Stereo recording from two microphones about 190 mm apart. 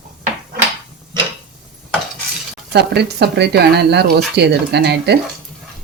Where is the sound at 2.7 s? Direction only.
60° right (ahead or behind).